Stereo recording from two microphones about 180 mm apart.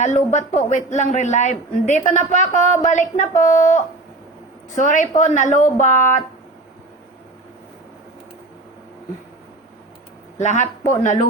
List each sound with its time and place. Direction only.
0.3 s speech: 40° left (ahead or behind)
10.3 s speech: 40° left (ahead or behind)